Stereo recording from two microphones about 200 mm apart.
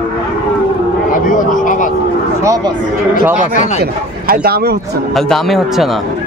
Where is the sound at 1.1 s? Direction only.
40° left (ahead or behind).